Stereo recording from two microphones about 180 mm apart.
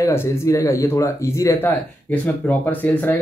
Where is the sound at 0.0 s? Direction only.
15° left (ahead or behind).